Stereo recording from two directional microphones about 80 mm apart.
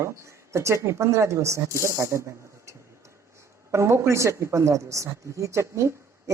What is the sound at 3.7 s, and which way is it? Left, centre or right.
A woman's voice, right.